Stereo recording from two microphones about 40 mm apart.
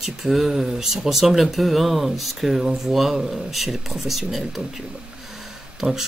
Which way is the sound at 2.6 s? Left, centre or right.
Centre.